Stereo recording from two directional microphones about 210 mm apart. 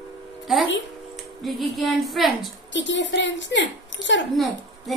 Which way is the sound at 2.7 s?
60° left (ahead or behind).